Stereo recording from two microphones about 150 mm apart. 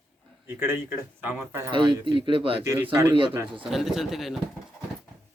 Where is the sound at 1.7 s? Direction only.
30° right (ahead or behind).